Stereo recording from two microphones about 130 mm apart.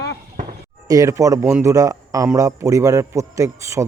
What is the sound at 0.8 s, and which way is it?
A man's voice, 25° right (ahead or behind).